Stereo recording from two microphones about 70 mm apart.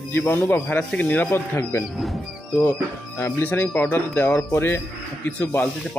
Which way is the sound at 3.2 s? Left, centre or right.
Left.